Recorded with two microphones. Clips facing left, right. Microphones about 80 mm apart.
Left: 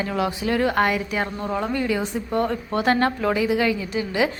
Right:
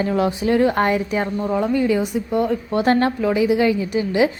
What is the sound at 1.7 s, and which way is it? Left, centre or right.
Speech, centre.